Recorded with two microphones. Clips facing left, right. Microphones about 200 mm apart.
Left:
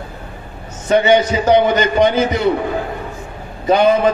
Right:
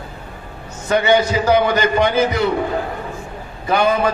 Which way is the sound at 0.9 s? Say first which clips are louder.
Left 3 dB; 20° left (ahead or behind).